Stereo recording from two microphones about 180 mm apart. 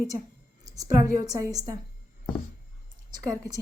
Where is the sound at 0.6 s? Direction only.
20° right (ahead or behind).